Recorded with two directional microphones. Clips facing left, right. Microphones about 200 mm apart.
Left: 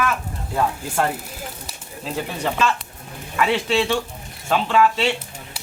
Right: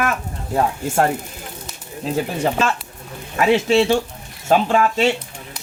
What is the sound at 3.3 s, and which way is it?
A man's voice, 45° right (ahead or behind).